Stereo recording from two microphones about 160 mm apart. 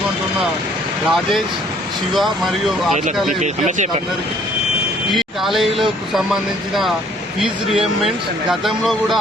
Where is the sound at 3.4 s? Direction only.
50° right (ahead or behind).